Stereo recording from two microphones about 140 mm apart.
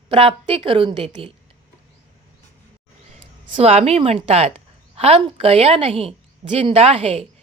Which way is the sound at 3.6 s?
45° right (ahead or behind).